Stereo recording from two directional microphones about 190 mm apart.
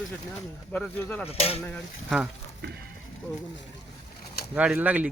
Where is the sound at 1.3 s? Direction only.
30° left (ahead or behind).